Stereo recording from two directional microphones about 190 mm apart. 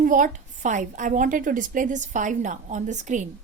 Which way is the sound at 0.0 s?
45° right (ahead or behind).